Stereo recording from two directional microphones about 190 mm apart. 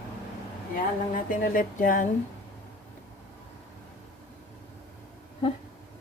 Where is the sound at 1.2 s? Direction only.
45° left (ahead or behind).